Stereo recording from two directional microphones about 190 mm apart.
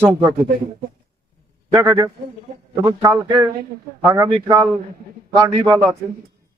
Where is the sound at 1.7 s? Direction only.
15° right (ahead or behind).